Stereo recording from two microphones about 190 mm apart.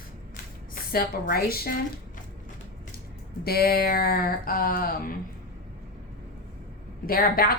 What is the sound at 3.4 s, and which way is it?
A woman's voice, 55° left (ahead or behind).